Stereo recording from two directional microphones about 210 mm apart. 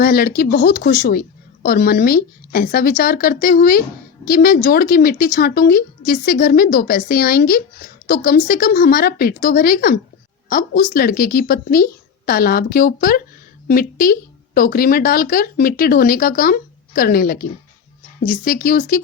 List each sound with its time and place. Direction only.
0.0 s speech: 45° left (ahead or behind)